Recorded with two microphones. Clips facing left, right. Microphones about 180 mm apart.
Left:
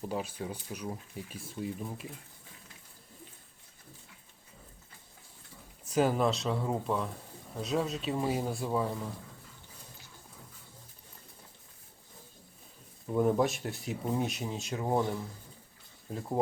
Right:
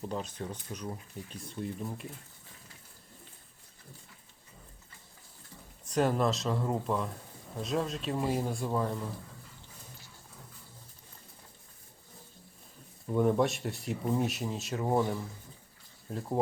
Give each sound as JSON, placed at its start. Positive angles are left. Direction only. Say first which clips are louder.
{"t": 0.0, "sound": "speech", "louder": "left 1 dB", "side_deg": 5}
{"t": 5.8, "sound": "speech", "louder": "left 1 dB", "side_deg": 5}
{"t": 13.1, "sound": "speech", "louder": "even", "side_deg": 0}